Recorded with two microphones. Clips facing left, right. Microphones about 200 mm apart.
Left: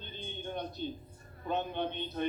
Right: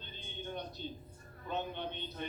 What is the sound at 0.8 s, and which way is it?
A man's voice, 55° left (ahead or behind).